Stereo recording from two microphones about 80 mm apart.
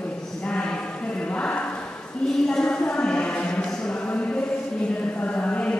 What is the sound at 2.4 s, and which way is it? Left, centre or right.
Music, centre.